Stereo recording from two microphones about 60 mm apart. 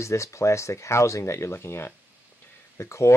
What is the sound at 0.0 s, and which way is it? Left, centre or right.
Speech, left.